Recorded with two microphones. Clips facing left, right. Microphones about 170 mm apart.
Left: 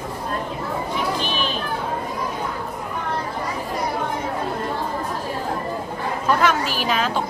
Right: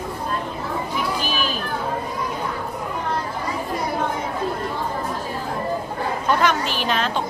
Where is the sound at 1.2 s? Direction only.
5° right (ahead or behind).